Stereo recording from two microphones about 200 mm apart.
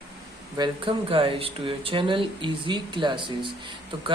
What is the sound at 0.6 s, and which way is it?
Speech, 25° right (ahead or behind).